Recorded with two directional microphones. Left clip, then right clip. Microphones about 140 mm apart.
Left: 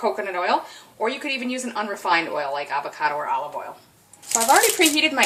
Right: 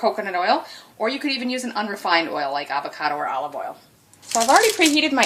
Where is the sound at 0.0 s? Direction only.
65° right (ahead or behind).